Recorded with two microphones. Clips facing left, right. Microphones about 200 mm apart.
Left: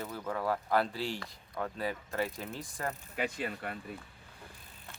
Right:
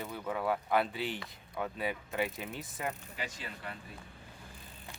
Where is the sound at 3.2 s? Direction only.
55° left (ahead or behind).